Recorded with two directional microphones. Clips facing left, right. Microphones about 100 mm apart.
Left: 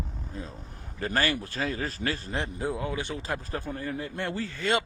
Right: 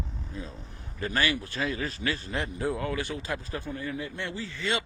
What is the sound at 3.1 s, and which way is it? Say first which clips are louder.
Speech: left 1 dB; 35° left (ahead or behind).